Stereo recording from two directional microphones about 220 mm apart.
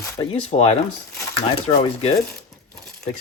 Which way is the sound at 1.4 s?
25° left (ahead or behind).